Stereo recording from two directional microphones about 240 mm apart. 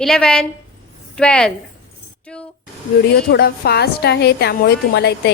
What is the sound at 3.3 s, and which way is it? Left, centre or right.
A woman's voice, left.